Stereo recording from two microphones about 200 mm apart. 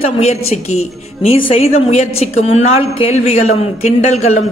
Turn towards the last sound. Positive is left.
turn(degrees=35)  # may be behind; listen again after turning